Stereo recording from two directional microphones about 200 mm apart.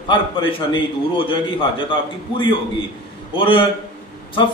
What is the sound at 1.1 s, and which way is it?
Speech, 25° left (ahead or behind).